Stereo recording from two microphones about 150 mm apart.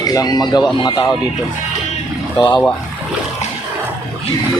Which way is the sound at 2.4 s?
25° left (ahead or behind).